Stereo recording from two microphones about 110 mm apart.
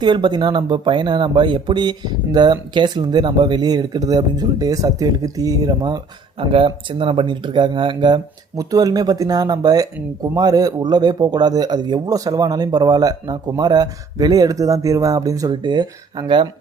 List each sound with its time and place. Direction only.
0.0 s speech: 45° right (ahead or behind)
6.5 s speech: 55° right (ahead or behind); by 15.5 s 35° right (ahead or behind)
15.6 s speech: 45° right (ahead or behind)